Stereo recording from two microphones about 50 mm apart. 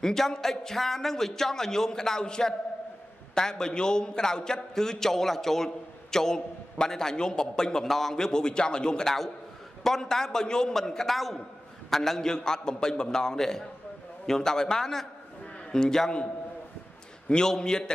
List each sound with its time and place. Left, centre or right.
0.0 s a man's voice: centre
17.3 s a man's voice: centre